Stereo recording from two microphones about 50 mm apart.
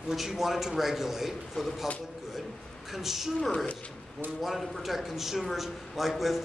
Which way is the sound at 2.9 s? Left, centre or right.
Centre.